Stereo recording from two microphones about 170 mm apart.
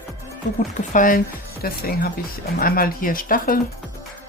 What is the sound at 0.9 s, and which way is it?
Speech, 55° left (ahead or behind).